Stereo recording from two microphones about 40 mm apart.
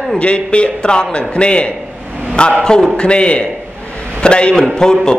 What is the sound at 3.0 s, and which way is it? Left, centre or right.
Speech, left.